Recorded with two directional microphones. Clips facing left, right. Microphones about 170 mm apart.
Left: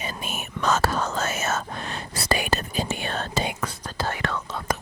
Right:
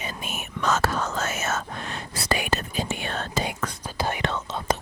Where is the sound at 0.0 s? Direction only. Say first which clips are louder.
Left 1 dB; 35° left (ahead or behind).